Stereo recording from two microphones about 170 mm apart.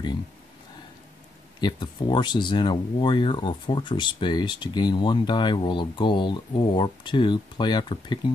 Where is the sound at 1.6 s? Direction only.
25° left (ahead or behind).